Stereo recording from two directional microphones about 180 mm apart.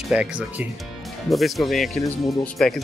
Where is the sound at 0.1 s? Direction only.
5° right (ahead or behind).